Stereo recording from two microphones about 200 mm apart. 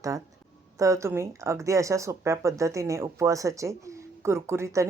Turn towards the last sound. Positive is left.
turn(degrees=-15)  # may be behind; listen again after turning